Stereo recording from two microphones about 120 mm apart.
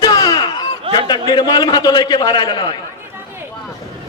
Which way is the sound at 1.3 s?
35° left (ahead or behind).